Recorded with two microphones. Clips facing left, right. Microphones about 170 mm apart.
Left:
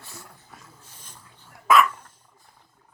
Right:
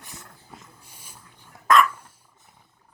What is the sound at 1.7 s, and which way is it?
Dog, 5° left (ahead or behind).